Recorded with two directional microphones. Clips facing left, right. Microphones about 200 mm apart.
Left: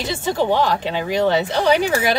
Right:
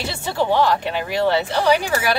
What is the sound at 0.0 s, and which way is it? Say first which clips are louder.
Speech: left 2 dB; 15° left (ahead or behind).